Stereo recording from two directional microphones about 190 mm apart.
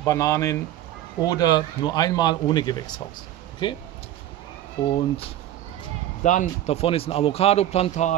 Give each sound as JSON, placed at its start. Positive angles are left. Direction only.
{"t": 0.0, "sound": "speech", "side_deg": 15}
{"t": 4.8, "sound": "speech", "side_deg": 30}
{"t": 6.2, "sound": "speech", "side_deg": 40}